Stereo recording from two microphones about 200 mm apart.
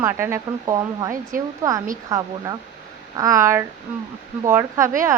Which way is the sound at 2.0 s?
20° right (ahead or behind).